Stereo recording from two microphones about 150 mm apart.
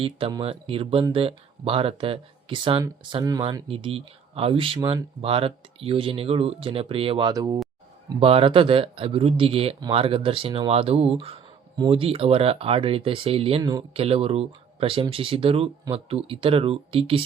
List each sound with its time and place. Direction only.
0.0 s speech: 30° right (ahead or behind)
8.2 s speech: 40° right (ahead or behind)
13.6 s speech: 25° right (ahead or behind)
13.9 s speech: 40° right (ahead or behind)